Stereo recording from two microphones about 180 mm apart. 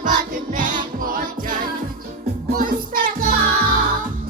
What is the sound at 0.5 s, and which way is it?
Music, 45° right (ahead or behind).